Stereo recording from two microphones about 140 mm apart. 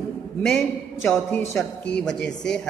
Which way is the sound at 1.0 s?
20° left (ahead or behind).